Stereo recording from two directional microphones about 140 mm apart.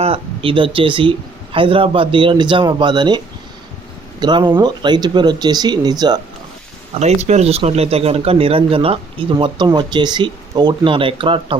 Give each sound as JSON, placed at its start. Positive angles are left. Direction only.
{"t": 0.0, "sound": "speech", "side_deg": -40}
{"t": 4.2, "sound": "speech", "side_deg": -30}
{"t": 7.0, "sound": "speech", "side_deg": -50}